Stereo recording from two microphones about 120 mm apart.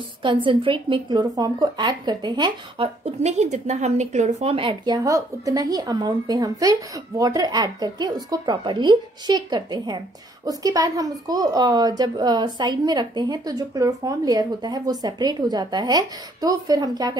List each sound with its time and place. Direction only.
0.2 s a woman's voice: 45° right (ahead or behind)
3.2 s speech: 70° right (ahead or behind)
4.6 s a woman's voice: 40° right (ahead or behind)